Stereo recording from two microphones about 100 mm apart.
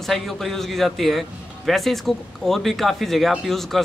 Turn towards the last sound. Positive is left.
turn(degrees=0)  # may be behind; listen again after turning